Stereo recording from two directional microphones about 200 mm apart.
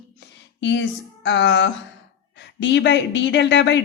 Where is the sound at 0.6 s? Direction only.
60° left (ahead or behind).